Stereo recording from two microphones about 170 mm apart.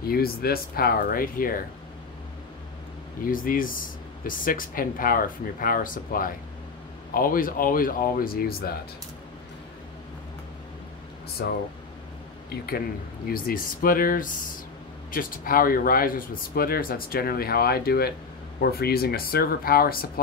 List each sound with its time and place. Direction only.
0.1 s speech: 65° left (ahead or behind)
3.3 s speech: 55° left (ahead or behind)
11.4 s speech: 70° left (ahead or behind)
13.3 s speech: 60° left (ahead or behind)